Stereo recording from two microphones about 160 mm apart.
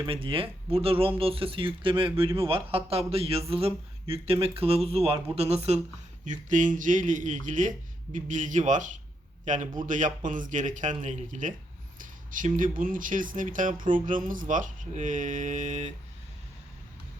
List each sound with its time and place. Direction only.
0.0 s speech: 35° right (ahead or behind)
6.2 s a man's voice: 50° right (ahead or behind)